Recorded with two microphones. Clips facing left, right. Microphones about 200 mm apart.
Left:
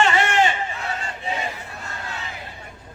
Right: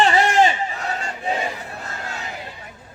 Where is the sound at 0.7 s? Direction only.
40° right (ahead or behind).